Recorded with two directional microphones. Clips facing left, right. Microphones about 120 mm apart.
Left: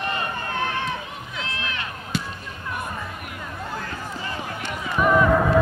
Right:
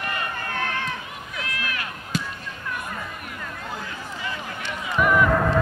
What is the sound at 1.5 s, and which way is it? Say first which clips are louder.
Chop: right 1 dB; 25° left (ahead or behind).